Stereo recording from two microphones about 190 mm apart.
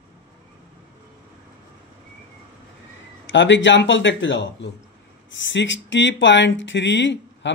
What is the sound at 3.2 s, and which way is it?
Speech, 75° left (ahead or behind).